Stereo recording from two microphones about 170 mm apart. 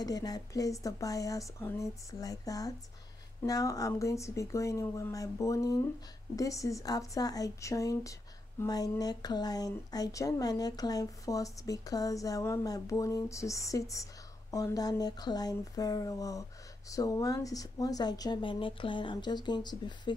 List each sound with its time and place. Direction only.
0.0 s speech: 20° left (ahead or behind)